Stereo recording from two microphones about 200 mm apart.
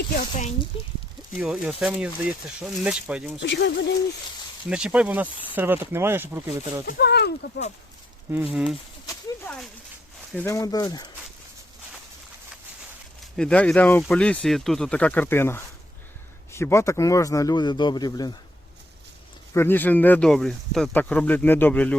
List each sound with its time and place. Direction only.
0.7 s speech: 25° left (ahead or behind)
1.4 s speech: 5° right (ahead or behind)
3.4 s speech: 60° left (ahead or behind)
4.7 s speech: 5° right (ahead or behind)
6.8 s speech: 55° left (ahead or behind)
8.5 s speech: centre (ahead or behind)
10.3 s speech: 15° left (ahead or behind)
13.3 s speech: 5° left (ahead or behind); by 18.3 s 20° left (ahead or behind)
19.5 s speech: 10° left (ahead or behind)